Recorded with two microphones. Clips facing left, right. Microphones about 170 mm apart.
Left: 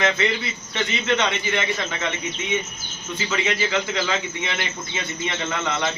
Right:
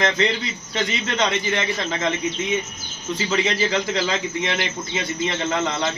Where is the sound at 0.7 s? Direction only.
35° right (ahead or behind).